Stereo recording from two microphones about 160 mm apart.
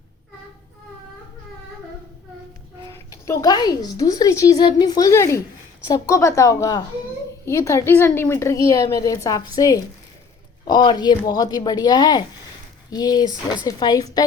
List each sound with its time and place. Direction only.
2.9 s speech: 20° left (ahead or behind)